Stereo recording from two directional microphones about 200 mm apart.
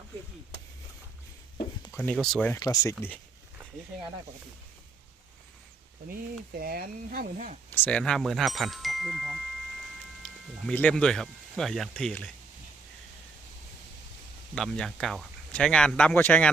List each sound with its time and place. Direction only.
1.9 s speech: centre (ahead or behind)
6.6 s speech: 45° right (ahead or behind)
7.7 s speech: 5° left (ahead or behind)
14.5 s speech: centre (ahead or behind)